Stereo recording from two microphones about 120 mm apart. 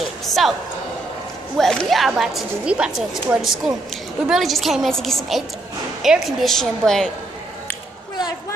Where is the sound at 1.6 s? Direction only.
5° left (ahead or behind).